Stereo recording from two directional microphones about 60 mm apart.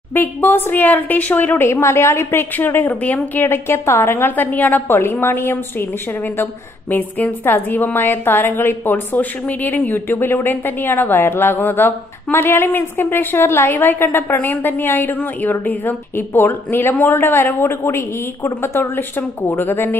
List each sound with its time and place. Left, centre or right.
0.1 s a woman's voice: left
1.6 s a woman's voice: left
2.5 s a woman's voice: left